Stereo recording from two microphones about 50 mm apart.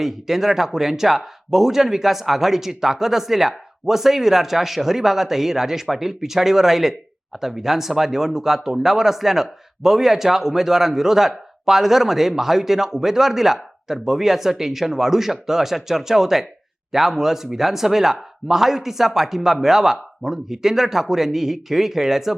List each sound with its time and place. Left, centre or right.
0.0 s speech: centre